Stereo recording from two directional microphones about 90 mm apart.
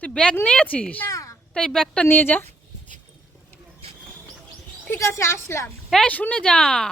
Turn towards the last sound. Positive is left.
turn(degrees=10)  # may be behind; listen again after turning